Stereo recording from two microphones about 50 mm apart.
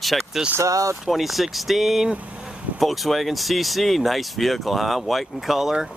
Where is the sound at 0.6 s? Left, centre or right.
Right.